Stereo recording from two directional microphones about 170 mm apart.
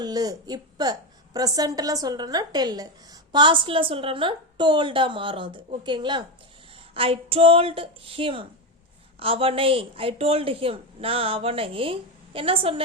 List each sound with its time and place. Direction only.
0.0 s a woman's voice: 20° right (ahead or behind)